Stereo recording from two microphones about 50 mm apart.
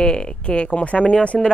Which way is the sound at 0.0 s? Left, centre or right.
Centre.